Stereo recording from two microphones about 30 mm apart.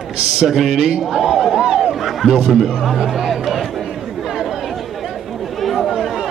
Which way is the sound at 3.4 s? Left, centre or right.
Centre.